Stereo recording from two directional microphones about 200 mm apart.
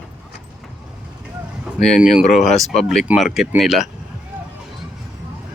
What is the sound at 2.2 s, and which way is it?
Speech, 35° left (ahead or behind).